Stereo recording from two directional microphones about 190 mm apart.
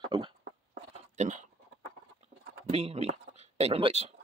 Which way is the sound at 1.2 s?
40° right (ahead or behind).